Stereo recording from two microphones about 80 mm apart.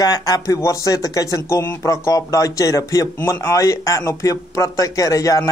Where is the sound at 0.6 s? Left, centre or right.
Left.